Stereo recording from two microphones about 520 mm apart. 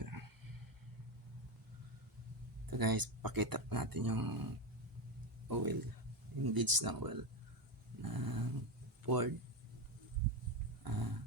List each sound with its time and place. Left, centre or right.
0.0 s a sound: right
2.6 s speech: right
5.5 s speech: right
8.0 s dog: right
9.0 s speech: right
10.8 s roaring cats: right